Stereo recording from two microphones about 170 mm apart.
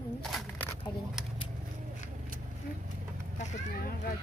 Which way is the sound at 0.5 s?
10° left (ahead or behind).